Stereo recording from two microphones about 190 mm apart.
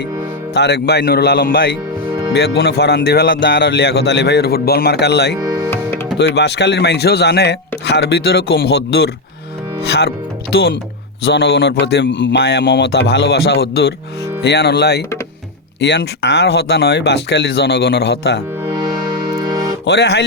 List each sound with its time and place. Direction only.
0.5 s speech: 60° left (ahead or behind)
5.4 s music: 20° right (ahead or behind)
6.1 s speech: 65° left (ahead or behind)
10.5 s speech: 75° left (ahead or behind)
11.3 s speech: 65° left (ahead or behind)
19.8 s speech: 65° left (ahead or behind)